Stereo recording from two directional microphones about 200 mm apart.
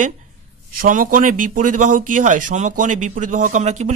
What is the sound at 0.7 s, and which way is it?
A man's voice, 45° right (ahead or behind).